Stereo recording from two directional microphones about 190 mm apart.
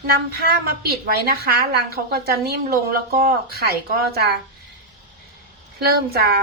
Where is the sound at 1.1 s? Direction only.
55° right (ahead or behind).